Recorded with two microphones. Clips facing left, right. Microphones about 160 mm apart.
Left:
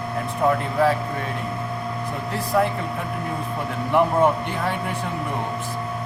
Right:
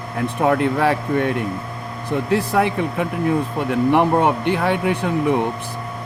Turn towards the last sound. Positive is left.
turn(degrees=-70)  # may be behind; listen again after turning